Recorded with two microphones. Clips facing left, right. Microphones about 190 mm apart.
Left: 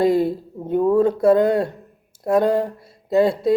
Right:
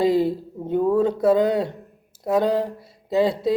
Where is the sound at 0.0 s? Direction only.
50° left (ahead or behind).